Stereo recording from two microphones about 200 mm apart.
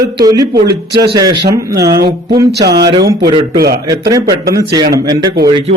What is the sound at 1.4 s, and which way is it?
Speech, 55° right (ahead or behind).